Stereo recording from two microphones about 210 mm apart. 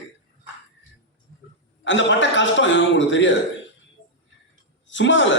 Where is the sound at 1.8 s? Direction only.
60° left (ahead or behind).